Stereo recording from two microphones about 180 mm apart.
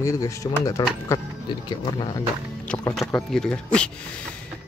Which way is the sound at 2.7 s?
15° left (ahead or behind).